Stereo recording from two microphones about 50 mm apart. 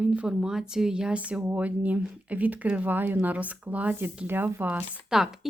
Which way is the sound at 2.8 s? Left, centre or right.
Right.